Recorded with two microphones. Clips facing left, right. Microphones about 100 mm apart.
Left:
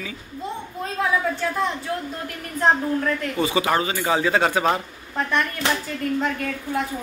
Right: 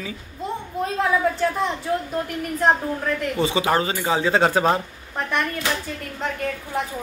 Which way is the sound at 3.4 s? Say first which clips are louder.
Right 1 dB; 25° right (ahead or behind).